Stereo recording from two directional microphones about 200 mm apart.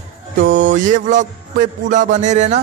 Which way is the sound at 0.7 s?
40° right (ahead or behind).